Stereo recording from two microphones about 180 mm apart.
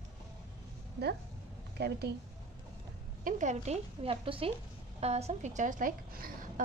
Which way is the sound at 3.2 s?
45° right (ahead or behind).